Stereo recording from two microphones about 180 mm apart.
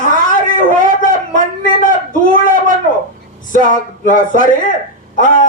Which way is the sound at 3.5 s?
45° left (ahead or behind).